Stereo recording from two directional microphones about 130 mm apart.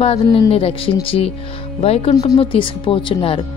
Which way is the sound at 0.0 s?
50° left (ahead or behind).